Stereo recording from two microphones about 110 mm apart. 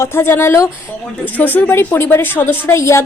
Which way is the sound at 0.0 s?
20° left (ahead or behind).